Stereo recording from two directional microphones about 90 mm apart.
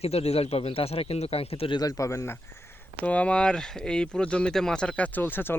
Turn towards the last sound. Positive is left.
turn(degrees=20)  # may be behind; listen again after turning